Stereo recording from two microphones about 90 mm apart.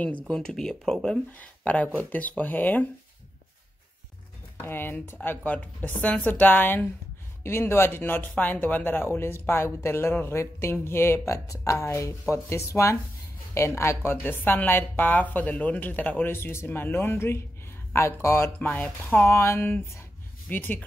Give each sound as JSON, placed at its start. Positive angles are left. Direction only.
{"t": 0.3, "sound": "a woman's voice", "side_deg": 10}
{"t": 4.6, "sound": "a woman's voice", "side_deg": 25}
{"t": 18.6, "sound": "speech", "side_deg": 15}
{"t": 19.3, "sound": "a woman's voice", "side_deg": 30}
{"t": 20.4, "sound": "a woman's voice", "side_deg": 20}